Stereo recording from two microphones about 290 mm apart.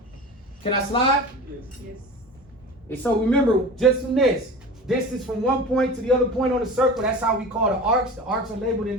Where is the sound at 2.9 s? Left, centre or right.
Centre.